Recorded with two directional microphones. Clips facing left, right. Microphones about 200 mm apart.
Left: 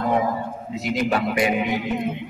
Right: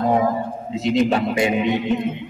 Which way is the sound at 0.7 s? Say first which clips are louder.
Right 5 dB; 25° right (ahead or behind).